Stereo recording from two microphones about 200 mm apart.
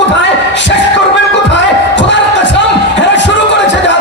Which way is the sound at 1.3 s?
65° left (ahead or behind).